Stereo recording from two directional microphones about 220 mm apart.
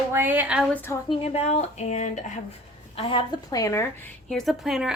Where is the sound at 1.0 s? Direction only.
30° left (ahead or behind).